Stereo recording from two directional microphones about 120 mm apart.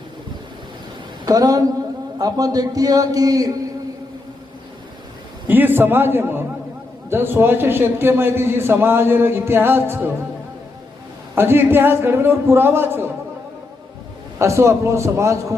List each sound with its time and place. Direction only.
1.2 s a woman's voice: 30° right (ahead or behind)
5.5 s a man's voice: 15° right (ahead or behind)
11.3 s a man's voice: 20° right (ahead or behind)
14.3 s a man's voice: 25° right (ahead or behind)